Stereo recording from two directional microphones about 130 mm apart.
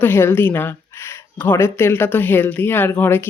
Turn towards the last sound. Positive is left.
turn(degrees=15)  # may be behind; listen again after turning